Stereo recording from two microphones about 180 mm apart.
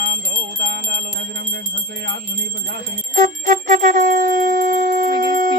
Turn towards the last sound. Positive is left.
turn(degrees=-50)  # may be behind; listen again after turning